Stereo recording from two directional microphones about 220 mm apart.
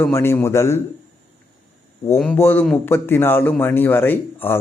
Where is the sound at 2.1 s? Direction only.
5° left (ahead or behind).